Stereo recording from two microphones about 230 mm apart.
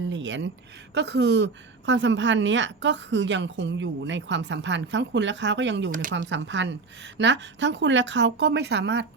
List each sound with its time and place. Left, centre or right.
0.1 s a sound: right
0.9 s a woman's voice: right
5.9 s speech: right
6.1 s a woman's voice: right